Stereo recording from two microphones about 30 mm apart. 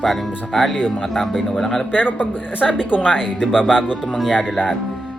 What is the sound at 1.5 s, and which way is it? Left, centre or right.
Speech, centre.